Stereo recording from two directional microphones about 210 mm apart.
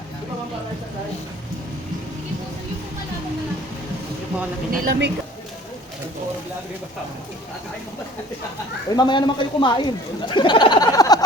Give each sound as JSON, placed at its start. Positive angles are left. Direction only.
{"t": 4.7, "sound": "speech", "side_deg": -55}
{"t": 8.9, "sound": "speech", "side_deg": 20}